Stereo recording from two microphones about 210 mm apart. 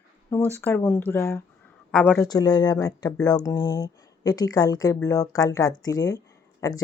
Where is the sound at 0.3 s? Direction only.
10° left (ahead or behind).